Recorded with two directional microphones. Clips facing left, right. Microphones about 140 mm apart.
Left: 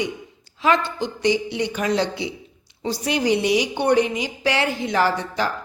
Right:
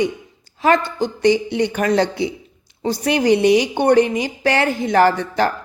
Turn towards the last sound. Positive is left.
turn(degrees=-55)  # may be behind; listen again after turning